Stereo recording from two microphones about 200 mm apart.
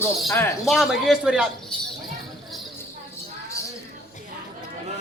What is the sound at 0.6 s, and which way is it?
Speech, centre (ahead or behind).